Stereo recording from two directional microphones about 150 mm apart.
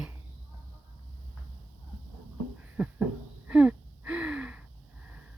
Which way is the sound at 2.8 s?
5° right (ahead or behind).